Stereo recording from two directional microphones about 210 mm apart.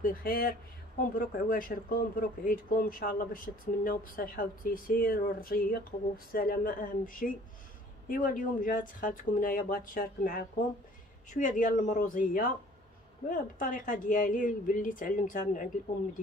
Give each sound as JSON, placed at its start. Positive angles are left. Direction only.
{"t": 0.0, "sound": "speech", "side_deg": 45}